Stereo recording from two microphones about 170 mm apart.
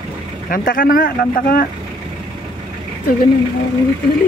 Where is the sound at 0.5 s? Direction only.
55° left (ahead or behind).